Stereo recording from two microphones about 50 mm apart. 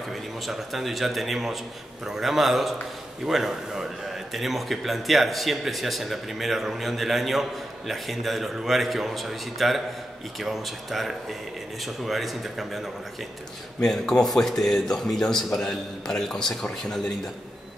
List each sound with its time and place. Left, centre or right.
0.5 s a man's voice: centre
13.8 s a man's voice: centre
14.2 s a man's voice: centre